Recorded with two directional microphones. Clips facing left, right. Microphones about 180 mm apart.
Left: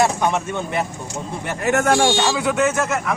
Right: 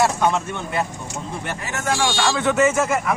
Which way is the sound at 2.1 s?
20° left (ahead or behind).